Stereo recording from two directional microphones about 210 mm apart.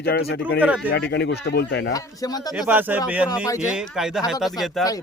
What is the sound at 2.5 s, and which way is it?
Speech, 5° right (ahead or behind).